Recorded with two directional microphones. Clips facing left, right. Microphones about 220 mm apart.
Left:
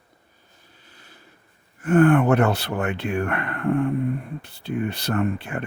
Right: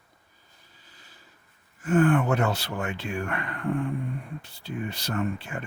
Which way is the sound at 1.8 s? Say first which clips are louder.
Left 5 dB; 60° left (ahead or behind).